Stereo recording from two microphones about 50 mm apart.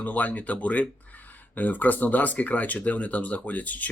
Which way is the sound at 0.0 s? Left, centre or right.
Left.